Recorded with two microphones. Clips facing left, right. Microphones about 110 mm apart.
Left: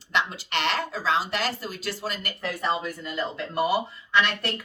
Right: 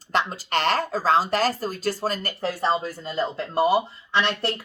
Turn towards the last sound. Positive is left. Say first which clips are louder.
# right 1 dB
turn(degrees=-30)  # may be behind; listen again after turning